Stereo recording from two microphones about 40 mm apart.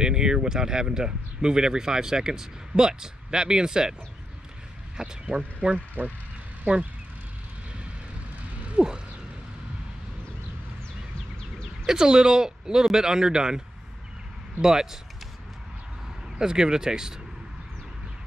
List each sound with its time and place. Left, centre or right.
0.0 s speech: centre
5.0 s speech: centre
6.0 s speech: right
8.6 s mechanisms: right
11.8 s speech: centre
14.6 s speech: centre
16.3 s speech: centre